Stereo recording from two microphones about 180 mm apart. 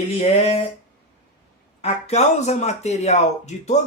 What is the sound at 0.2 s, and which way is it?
Speech, 35° left (ahead or behind).